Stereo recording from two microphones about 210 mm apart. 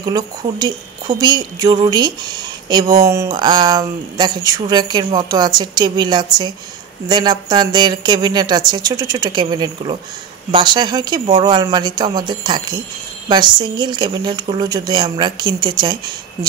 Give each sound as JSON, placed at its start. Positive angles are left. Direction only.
{"t": 0.0, "sound": "speech", "side_deg": -20}